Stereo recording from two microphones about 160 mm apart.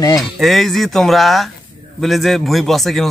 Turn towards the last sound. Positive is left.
turn(degrees=0)  # may be behind; listen again after turning